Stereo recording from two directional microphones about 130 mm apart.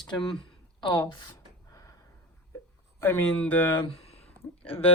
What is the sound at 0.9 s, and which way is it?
Speech, 30° left (ahead or behind).